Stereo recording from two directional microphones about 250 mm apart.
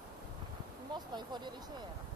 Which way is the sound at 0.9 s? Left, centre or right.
Centre.